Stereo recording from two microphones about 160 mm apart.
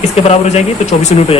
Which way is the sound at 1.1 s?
45° left (ahead or behind).